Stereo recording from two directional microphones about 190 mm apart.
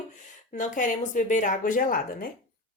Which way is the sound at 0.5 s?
40° left (ahead or behind).